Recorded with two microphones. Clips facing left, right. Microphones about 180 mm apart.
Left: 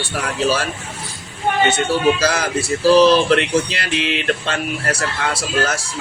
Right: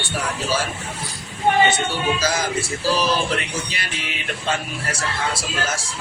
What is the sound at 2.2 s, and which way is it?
Speech, 70° left (ahead or behind).